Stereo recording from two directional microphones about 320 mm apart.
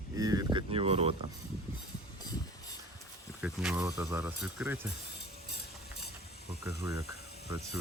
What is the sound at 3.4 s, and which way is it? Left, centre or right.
Speech, centre.